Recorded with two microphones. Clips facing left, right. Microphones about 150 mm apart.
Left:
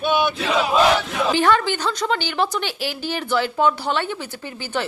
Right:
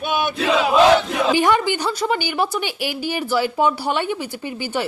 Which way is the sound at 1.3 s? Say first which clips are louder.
Right 1 dB; 15° right (ahead or behind).